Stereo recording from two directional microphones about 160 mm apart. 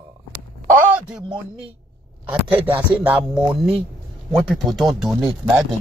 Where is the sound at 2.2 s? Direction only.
10° right (ahead or behind).